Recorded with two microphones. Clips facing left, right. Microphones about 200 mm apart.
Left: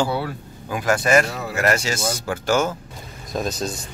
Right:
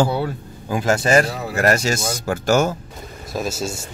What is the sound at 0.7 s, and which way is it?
Speech, 30° right (ahead or behind).